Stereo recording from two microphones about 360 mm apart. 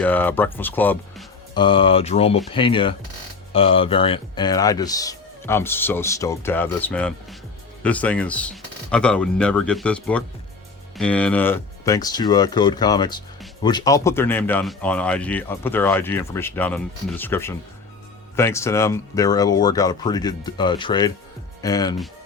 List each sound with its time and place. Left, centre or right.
0.0 s speech: centre